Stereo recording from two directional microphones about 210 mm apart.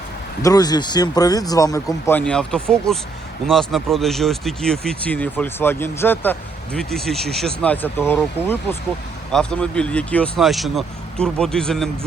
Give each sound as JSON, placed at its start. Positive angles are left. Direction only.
{"t": 0.4, "sound": "speech", "side_deg": 20}